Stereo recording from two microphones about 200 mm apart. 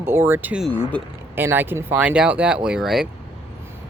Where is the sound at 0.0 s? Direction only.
10° right (ahead or behind).